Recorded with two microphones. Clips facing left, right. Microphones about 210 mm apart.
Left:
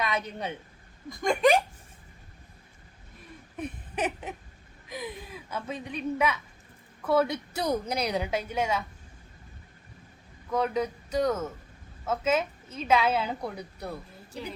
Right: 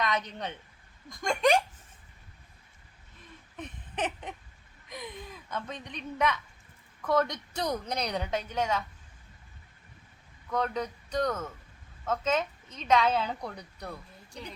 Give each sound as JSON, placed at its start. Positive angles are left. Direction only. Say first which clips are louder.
{"t": 0.0, "sound": "speech", "louder": "left 1 dB", "side_deg": 10}
{"t": 3.6, "sound": "a sound", "louder": "left 3 dB", "side_deg": 10}
{"t": 4.9, "sound": "a woman's voice", "louder": "left 4 dB", "side_deg": 5}
{"t": 10.5, "sound": "a woman's voice", "louder": "left 4 dB", "side_deg": 10}